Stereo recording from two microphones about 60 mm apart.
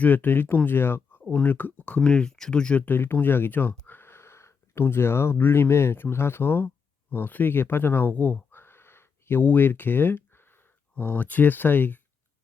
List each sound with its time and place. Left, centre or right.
0.0 s speech: left
2.0 s speech: centre
2.8 s speech: left